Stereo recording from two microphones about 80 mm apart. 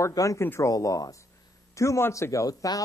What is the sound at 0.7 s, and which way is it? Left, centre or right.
Speech, left.